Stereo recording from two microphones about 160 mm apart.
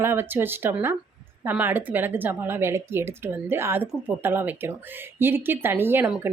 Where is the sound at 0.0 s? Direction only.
15° right (ahead or behind).